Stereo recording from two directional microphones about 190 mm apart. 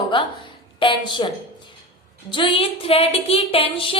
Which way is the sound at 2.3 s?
30° left (ahead or behind).